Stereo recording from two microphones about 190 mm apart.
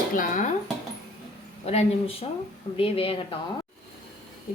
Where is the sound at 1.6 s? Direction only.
35° left (ahead or behind).